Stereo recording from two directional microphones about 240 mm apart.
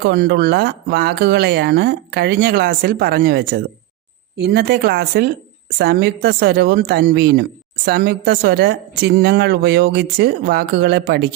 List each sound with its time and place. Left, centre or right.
0.0 s speech: right